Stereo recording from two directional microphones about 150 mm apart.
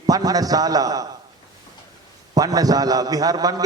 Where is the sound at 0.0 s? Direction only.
25° right (ahead or behind).